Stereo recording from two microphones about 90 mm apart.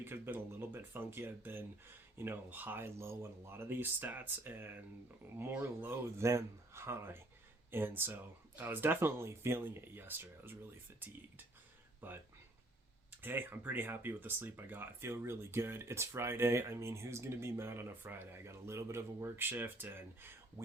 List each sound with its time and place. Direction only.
0.0 s speech: 25° right (ahead or behind)